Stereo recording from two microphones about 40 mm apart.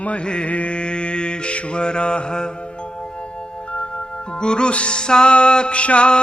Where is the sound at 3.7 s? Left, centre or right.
Left.